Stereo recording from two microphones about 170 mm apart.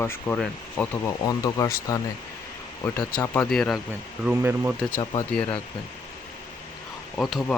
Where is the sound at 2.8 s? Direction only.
5° left (ahead or behind).